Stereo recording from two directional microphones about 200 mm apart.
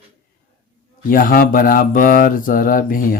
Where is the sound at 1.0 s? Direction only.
45° left (ahead or behind).